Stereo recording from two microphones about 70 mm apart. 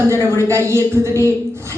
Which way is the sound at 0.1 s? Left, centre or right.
Right.